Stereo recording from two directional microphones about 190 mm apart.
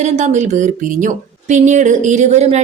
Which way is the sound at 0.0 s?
40° right (ahead or behind).